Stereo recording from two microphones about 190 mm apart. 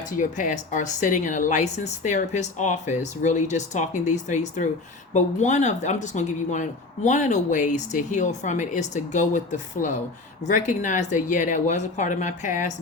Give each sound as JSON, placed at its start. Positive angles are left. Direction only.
{"t": 0.2, "sound": "speech", "side_deg": 45}